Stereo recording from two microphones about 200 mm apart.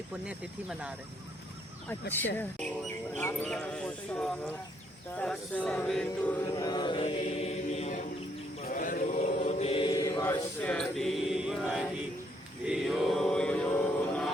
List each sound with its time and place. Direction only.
0.3 s speech: 5° right (ahead or behind)
1.9 s speech: 10° left (ahead or behind)
6.6 s chant: 20° left (ahead or behind)
8.6 s chant: 40° left (ahead or behind)
9.4 s mantra: 30° left (ahead or behind); by 11.9 s 5° right (ahead or behind)
12.6 s chant: centre (ahead or behind)